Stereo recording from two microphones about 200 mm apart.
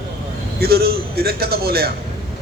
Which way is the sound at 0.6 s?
50° right (ahead or behind).